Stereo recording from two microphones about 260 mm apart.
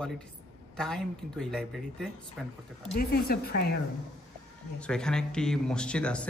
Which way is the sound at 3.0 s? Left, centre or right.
Left.